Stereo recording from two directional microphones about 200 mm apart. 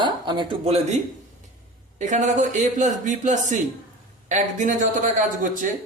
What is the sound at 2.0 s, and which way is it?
Speech, 35° right (ahead or behind).